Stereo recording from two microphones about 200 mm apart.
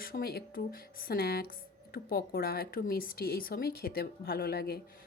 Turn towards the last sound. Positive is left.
turn(degrees=50)  # may be behind; listen again after turning